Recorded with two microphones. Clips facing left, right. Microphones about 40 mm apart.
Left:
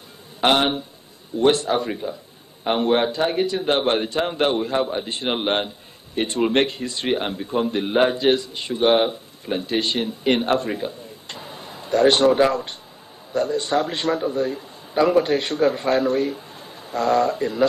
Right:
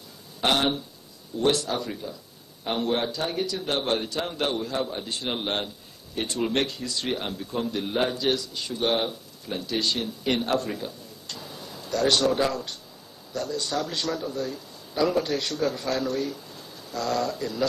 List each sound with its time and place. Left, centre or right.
0.4 s speech: left